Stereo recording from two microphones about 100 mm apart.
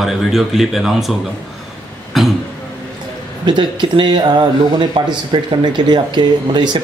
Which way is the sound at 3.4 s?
50° right (ahead or behind).